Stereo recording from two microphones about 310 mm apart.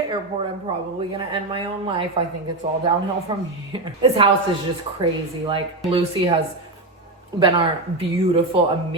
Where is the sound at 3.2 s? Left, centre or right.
Centre.